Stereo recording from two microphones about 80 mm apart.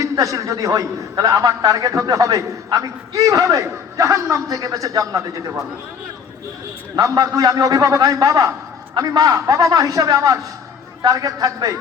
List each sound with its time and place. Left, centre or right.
0.0 s a man's voice: right
7.0 s a man's voice: right